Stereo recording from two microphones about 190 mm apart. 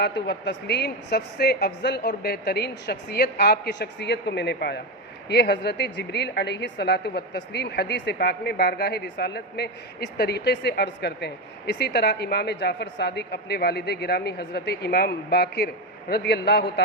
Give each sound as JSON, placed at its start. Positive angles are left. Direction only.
{"t": 0.0, "sound": "a woman's voice", "side_deg": 60}